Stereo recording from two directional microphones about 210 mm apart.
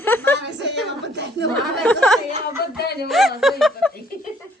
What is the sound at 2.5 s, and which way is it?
Speech, 50° left (ahead or behind).